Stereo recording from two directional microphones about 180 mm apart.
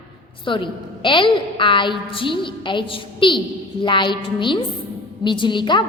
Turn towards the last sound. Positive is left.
turn(degrees=25)  # may be behind; listen again after turning